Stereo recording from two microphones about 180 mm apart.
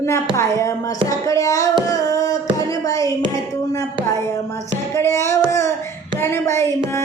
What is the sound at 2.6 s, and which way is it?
Speech, 20° left (ahead or behind).